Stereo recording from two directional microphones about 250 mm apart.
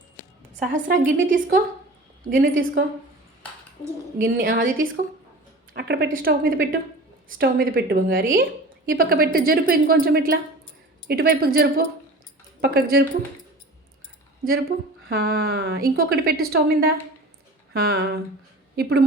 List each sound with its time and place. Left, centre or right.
0.6 s a woman's voice: right
4.2 s a woman's voice: right
15.1 s a woman's voice: right